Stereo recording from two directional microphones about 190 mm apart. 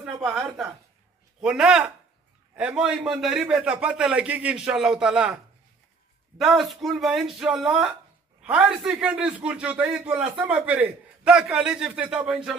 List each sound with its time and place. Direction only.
0.0 s a woman's voice: 5° right (ahead or behind)